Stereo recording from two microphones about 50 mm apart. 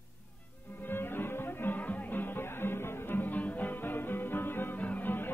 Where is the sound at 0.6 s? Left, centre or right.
Left.